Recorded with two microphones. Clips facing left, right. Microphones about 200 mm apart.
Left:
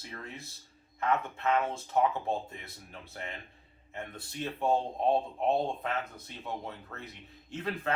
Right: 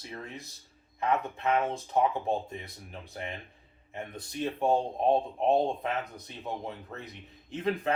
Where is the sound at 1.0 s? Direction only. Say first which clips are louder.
Right 1 dB; 15° right (ahead or behind).